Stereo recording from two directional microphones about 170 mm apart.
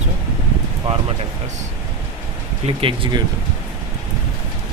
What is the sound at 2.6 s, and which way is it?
Speech, 30° right (ahead or behind).